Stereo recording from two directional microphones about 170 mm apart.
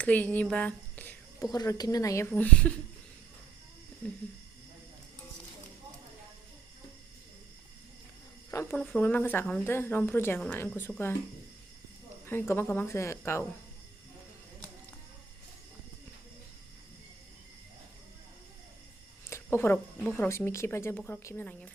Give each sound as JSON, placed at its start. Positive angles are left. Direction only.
{"t": 0.0, "sound": "a sound", "side_deg": 10}
{"t": 1.5, "sound": "a woman's voice", "side_deg": 25}
{"t": 2.3, "sound": "speech", "side_deg": 5}
{"t": 8.4, "sound": "speech", "side_deg": 15}
{"t": 12.2, "sound": "speech", "side_deg": 15}
{"t": 19.3, "sound": "speech", "side_deg": 15}